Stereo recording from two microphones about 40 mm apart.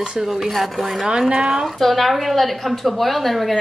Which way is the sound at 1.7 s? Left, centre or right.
Centre.